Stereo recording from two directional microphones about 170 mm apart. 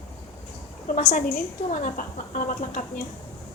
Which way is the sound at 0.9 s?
40° left (ahead or behind).